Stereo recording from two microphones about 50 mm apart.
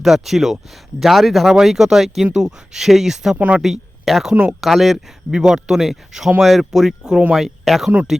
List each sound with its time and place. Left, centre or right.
0.0 s speech: centre
3.3 s speech: right
3.6 s speech: centre
5.3 s speech: centre